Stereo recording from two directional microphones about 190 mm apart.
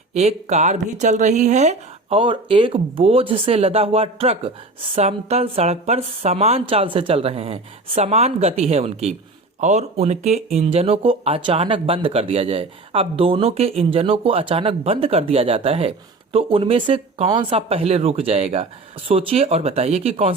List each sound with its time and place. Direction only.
0.1 s speech: 35° right (ahead or behind)